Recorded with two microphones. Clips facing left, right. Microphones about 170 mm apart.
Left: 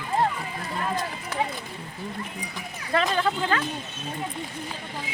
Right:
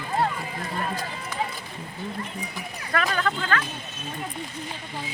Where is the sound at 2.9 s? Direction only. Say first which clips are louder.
Left 2 dB; 25° left (ahead or behind).